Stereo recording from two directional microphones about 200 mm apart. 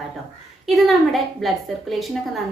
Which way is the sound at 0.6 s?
Centre (ahead or behind).